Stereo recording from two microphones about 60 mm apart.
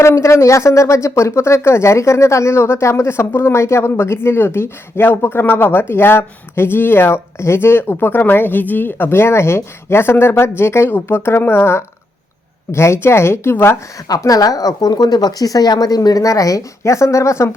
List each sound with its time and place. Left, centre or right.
0.0 s speech: left
14.3 s a woman's voice: left